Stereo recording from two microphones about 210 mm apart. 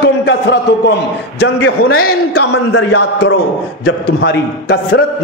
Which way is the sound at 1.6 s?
90° left.